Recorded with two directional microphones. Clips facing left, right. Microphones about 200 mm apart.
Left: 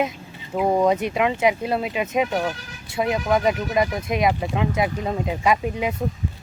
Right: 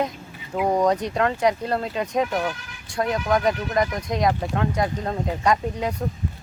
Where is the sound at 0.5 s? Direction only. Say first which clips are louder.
Left 1 dB; 5° left (ahead or behind).